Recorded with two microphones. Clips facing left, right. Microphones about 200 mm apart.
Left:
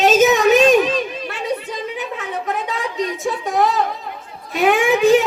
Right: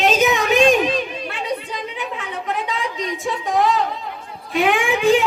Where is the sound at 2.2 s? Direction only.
45° left (ahead or behind).